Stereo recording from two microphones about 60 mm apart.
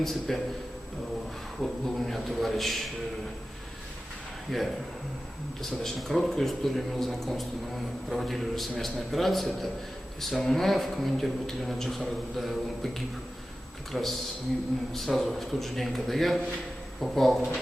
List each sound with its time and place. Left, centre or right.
0.0 s speech: centre
1.6 s speech: centre
4.5 s speech: centre
5.8 s speech: centre